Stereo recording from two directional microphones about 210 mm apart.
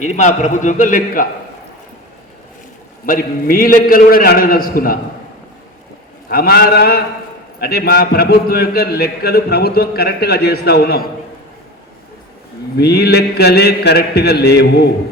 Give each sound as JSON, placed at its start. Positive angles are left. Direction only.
{"t": 0.0, "sound": "a man's voice", "side_deg": 35}
{"t": 3.1, "sound": "a man's voice", "side_deg": 45}
{"t": 6.2, "sound": "a man's voice", "side_deg": 45}
{"t": 12.7, "sound": "a man's voice", "side_deg": 50}